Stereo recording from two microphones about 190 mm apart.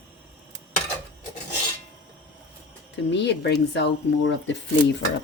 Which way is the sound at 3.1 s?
65° left (ahead or behind).